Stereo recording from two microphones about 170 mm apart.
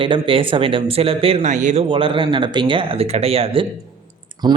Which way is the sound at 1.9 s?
30° right (ahead or behind).